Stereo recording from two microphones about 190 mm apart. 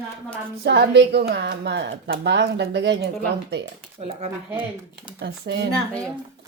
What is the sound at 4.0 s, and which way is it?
Speech, 35° right (ahead or behind).